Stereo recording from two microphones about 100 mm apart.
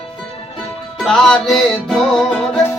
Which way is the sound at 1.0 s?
5° left (ahead or behind).